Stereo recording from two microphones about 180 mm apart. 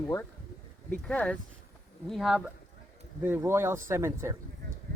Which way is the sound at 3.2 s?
10° right (ahead or behind).